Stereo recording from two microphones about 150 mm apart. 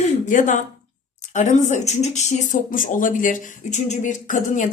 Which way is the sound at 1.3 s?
55° left (ahead or behind).